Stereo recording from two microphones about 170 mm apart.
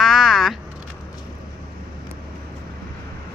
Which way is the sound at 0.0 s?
Centre (ahead or behind).